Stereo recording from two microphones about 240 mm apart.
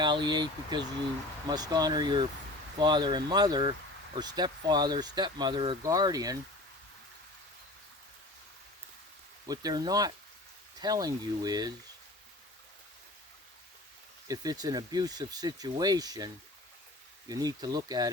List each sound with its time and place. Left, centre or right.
0.0 s speech: centre
9.5 s speech: centre
14.3 s speech: centre